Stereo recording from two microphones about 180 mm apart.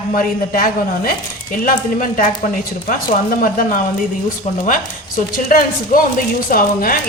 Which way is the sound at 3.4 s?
50° left (ahead or behind).